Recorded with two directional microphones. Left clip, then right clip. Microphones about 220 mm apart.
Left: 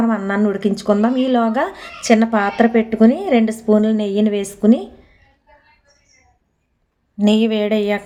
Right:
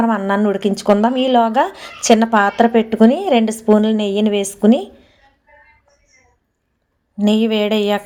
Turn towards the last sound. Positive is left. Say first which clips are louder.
# right 2 dB
turn(degrees=-5)  # may be behind; listen again after turning